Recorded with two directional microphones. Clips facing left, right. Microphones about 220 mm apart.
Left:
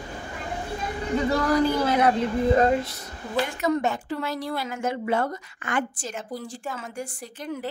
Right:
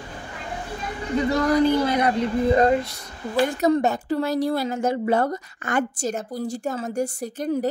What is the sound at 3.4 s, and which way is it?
Speech, 40° right (ahead or behind).